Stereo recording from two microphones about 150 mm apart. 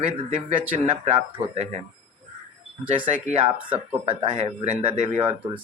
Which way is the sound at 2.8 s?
55° right (ahead or behind).